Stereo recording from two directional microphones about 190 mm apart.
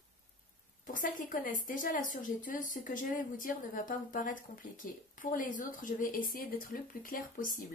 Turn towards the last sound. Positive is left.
turn(degrees=45)  # may be behind; listen again after turning